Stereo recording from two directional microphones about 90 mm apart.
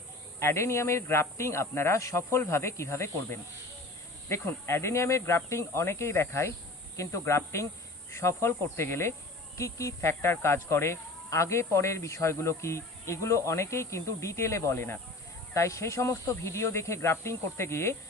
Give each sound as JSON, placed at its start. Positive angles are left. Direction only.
{"t": 0.3, "sound": "speech", "side_deg": 30}